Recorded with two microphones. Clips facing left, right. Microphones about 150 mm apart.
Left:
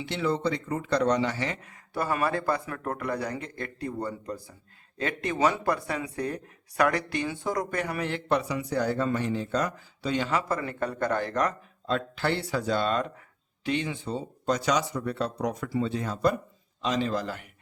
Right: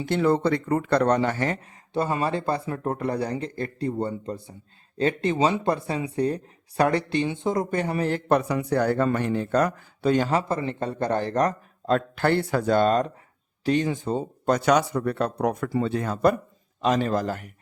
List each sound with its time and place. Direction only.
0.0 s speech: 50° right (ahead or behind)
1.6 s speech: 25° right (ahead or behind); by 10.3 s 45° right (ahead or behind)
10.3 s speech: 25° right (ahead or behind)
11.9 s speech: 50° right (ahead or behind)